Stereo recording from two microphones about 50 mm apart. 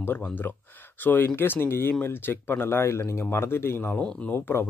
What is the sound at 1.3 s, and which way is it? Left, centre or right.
Speech, left.